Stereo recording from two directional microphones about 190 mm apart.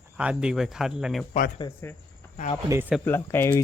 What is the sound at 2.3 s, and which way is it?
Speech, 35° left (ahead or behind).